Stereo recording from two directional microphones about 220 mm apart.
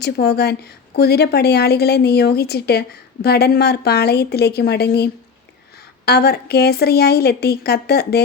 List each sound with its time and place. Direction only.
0.0 s a woman's voice: 45° left (ahead or behind)